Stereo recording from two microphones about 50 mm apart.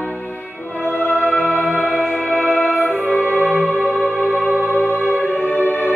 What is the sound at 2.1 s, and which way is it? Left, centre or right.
Music, left.